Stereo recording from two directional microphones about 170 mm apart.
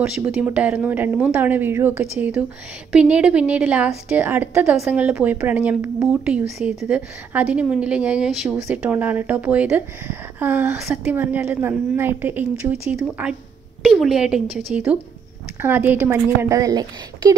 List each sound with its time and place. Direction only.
0.0 s a woman's voice: 5° right (ahead or behind)
15.6 s a woman's voice: 10° right (ahead or behind)